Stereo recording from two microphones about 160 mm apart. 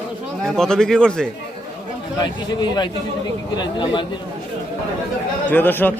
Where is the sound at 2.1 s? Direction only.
25° left (ahead or behind).